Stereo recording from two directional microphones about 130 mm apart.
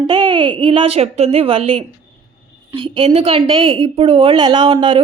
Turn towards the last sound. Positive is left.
turn(degrees=-40)  # may be behind; listen again after turning